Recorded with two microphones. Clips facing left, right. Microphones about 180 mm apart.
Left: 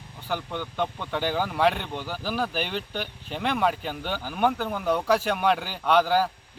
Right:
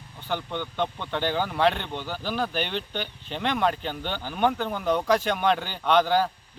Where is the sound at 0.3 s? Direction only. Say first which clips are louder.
Right 1 dB; 5° left (ahead or behind).